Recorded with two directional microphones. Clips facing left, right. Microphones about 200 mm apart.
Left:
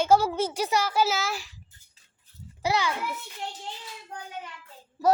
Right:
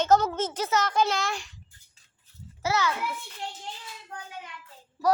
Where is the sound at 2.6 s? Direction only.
15° left (ahead or behind).